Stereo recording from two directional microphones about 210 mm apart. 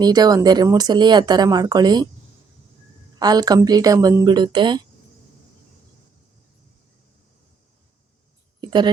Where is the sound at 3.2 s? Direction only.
20° right (ahead or behind).